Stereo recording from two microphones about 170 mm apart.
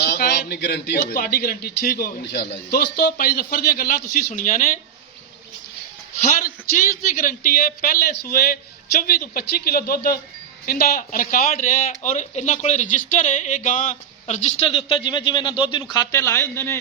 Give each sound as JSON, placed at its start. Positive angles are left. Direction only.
{"t": 0.0, "sound": "a sound", "side_deg": 70}
{"t": 1.1, "sound": "a man's voice", "side_deg": 55}
{"t": 6.7, "sound": "a man's voice", "side_deg": 55}